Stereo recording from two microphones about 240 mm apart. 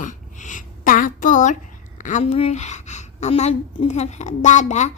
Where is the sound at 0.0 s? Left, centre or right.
Left.